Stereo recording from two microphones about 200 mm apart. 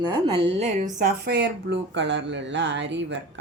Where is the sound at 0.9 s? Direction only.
55° right (ahead or behind).